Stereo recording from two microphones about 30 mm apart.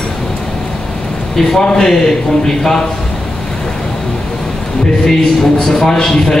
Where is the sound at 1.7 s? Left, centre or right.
Centre.